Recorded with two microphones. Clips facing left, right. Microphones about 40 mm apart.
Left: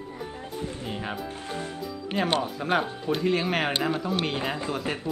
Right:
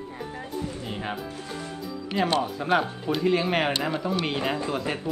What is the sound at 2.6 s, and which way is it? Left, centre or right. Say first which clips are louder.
Speech: right 2 dB; centre.